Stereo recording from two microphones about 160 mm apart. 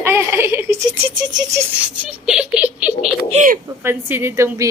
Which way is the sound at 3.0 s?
45° right (ahead or behind).